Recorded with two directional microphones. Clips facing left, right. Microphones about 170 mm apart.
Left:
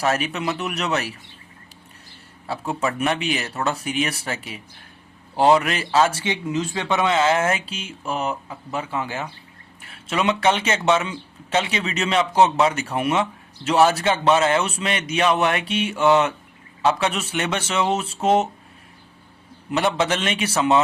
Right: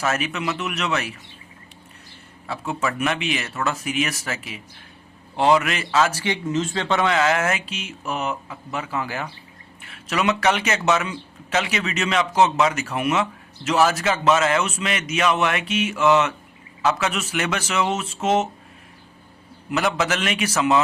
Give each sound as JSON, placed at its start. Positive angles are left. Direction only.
{"t": 0.0, "sound": "a man's voice", "side_deg": 35}
{"t": 2.5, "sound": "a man's voice", "side_deg": 35}
{"t": 19.7, "sound": "a man's voice", "side_deg": 30}